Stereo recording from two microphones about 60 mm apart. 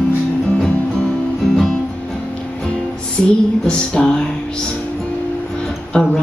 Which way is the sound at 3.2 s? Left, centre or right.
Centre.